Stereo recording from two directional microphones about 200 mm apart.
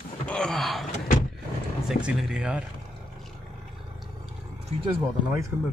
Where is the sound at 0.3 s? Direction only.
5° left (ahead or behind).